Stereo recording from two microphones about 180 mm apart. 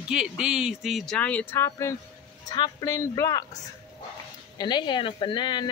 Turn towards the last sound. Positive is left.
turn(degrees=25)  # may be behind; listen again after turning